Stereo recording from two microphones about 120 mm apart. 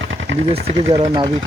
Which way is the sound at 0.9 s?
40° right (ahead or behind).